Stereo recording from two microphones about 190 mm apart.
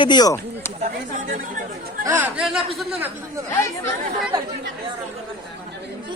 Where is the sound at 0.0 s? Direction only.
20° left (ahead or behind).